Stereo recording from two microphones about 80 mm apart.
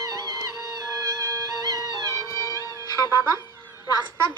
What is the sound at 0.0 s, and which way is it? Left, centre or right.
Music, right.